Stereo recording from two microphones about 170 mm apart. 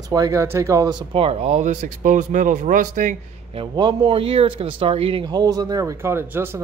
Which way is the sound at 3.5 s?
30° right (ahead or behind).